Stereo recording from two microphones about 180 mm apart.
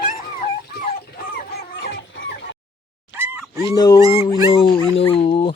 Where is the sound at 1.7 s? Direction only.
80° left.